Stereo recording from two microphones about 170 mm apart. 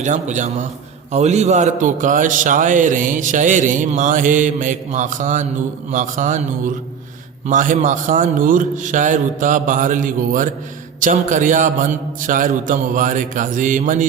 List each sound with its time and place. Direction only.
0.0 s a man's voice: 45° right (ahead or behind)